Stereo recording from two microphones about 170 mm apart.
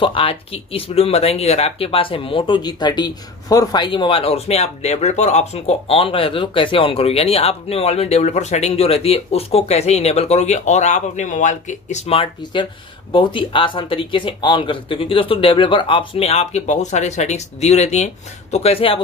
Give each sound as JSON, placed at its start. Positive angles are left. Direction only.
{"t": 0.0, "sound": "speech", "side_deg": 30}